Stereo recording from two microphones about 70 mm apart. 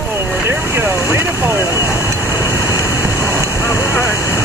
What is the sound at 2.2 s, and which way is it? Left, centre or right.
Vehicle, left.